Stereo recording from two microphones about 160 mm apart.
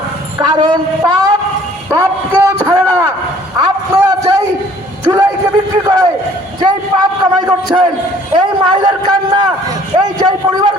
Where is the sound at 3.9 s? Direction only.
20° right (ahead or behind).